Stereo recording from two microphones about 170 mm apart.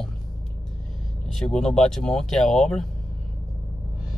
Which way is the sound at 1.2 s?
5° left (ahead or behind).